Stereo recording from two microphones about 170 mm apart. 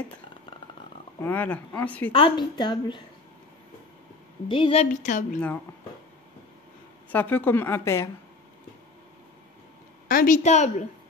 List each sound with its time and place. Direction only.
1.2 s a woman's voice: 10° left (ahead or behind)
2.1 s a woman's voice: 30° left (ahead or behind)
4.5 s a woman's voice: 30° left (ahead or behind); by 5.4 s 45° left (ahead or behind)
7.1 s a woman's voice: 10° left (ahead or behind)
10.0 s a woman's voice: 55° left (ahead or behind)